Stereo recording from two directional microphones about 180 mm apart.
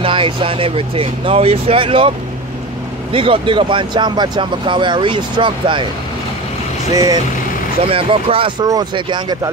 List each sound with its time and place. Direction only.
0.0 s speech: 30° right (ahead or behind)
7.8 s speech: 30° right (ahead or behind)